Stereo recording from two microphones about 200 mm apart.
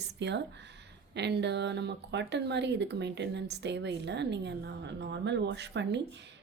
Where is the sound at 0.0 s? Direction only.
60° right (ahead or behind).